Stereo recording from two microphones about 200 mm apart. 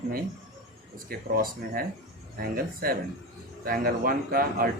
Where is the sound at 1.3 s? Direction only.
45° right (ahead or behind).